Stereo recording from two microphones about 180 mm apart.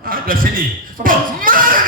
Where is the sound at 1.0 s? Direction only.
50° right (ahead or behind).